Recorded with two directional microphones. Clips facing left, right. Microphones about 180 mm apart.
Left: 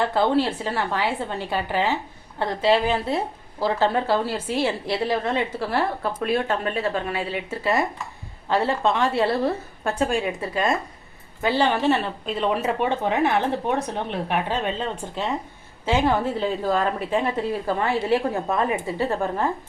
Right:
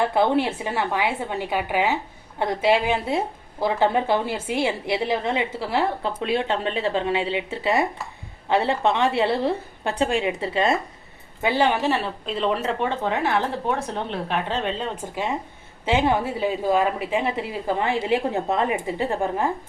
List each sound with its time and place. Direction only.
0.0 s a woman's voice: 10° right (ahead or behind)
11.4 s speech: 10° right (ahead or behind)
15.1 s a woman's voice: 15° right (ahead or behind)